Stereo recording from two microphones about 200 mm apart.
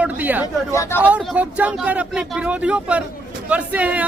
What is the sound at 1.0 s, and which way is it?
Speech, 5° right (ahead or behind).